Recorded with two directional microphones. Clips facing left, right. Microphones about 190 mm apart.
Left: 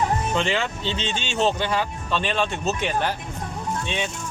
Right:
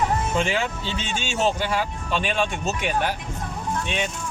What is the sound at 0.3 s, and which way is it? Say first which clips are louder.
Speech: even; 10° right (ahead or behind).